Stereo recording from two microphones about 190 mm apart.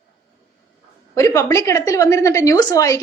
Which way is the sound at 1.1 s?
15° left (ahead or behind).